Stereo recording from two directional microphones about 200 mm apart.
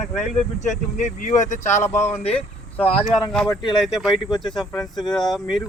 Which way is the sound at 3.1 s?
5° left (ahead or behind).